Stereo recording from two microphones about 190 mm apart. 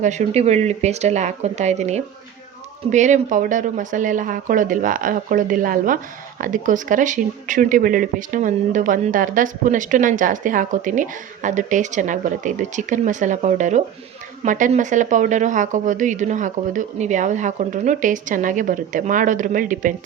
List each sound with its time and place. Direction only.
0.0 s a woman's voice: 40° right (ahead or behind)